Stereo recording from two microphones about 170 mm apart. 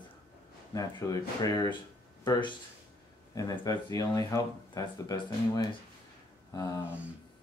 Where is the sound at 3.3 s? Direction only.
20° left (ahead or behind).